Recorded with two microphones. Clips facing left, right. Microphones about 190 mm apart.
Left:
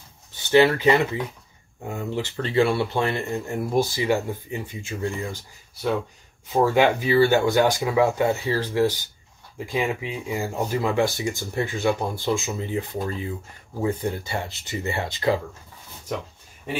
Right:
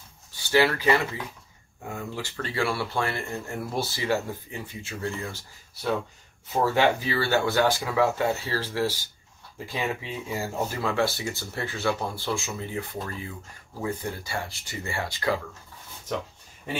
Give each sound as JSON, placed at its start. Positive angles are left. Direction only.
{"t": 0.4, "sound": "speech", "side_deg": 20}
{"t": 6.5, "sound": "speech", "side_deg": 15}